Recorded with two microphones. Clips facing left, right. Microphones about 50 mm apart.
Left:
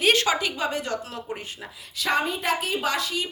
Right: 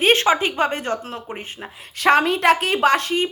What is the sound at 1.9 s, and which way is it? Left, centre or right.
Speech, right.